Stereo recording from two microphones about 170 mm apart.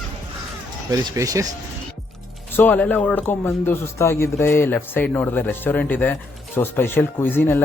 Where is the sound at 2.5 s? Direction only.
10° left (ahead or behind).